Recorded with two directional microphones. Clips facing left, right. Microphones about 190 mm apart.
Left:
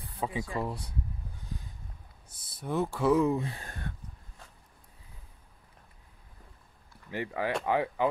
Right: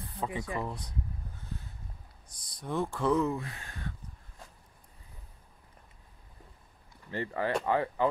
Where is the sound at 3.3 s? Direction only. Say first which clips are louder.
Left 5 dB; 25° left (ahead or behind).